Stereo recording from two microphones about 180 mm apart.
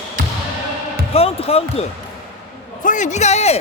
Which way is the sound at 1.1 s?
35° left (ahead or behind).